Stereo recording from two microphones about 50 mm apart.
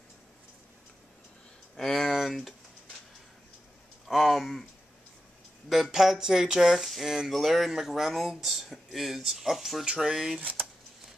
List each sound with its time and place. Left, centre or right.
1.8 s speech: centre
4.1 s speech: centre
5.9 s speech: centre
10.4 s a sound: right